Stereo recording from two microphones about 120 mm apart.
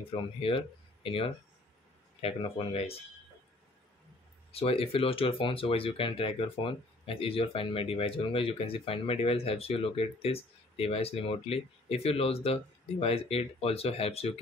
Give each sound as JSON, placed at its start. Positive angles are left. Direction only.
{"t": 0.1, "sound": "speech", "side_deg": 50}
{"t": 4.5, "sound": "speech", "side_deg": 55}